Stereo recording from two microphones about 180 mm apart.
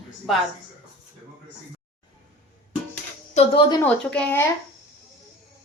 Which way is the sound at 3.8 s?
10° left (ahead or behind).